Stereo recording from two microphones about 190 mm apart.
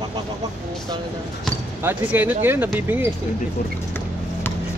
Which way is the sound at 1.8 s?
10° right (ahead or behind).